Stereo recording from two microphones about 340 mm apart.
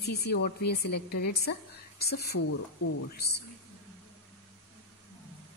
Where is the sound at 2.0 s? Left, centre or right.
Left.